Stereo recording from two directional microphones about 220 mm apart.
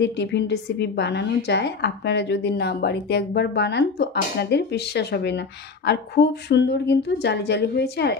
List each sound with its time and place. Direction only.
0.0 s a woman's voice: 50° left (ahead or behind)